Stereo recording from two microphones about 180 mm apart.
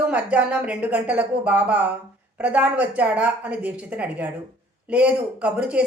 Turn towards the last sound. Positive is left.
turn(degrees=-5)  # may be behind; listen again after turning